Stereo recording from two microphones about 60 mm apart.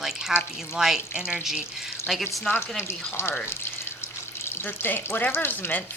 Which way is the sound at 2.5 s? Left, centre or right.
Left.